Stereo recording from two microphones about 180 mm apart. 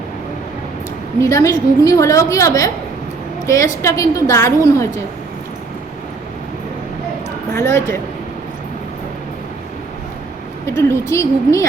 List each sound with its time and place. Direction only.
1.2 s a woman's voice: 15° left (ahead or behind)
7.5 s a woman's voice: 15° left (ahead or behind)
10.7 s a woman's voice: 15° left (ahead or behind)